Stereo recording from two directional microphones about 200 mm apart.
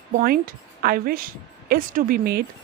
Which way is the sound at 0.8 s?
45° right (ahead or behind).